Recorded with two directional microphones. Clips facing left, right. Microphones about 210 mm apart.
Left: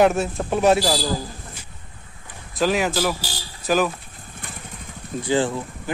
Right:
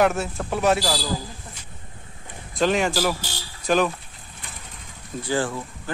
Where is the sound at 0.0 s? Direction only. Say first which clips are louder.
Left 3 dB; 20° left (ahead or behind).